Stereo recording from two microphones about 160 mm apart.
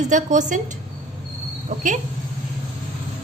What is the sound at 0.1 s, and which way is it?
Speech, 50° right (ahead or behind).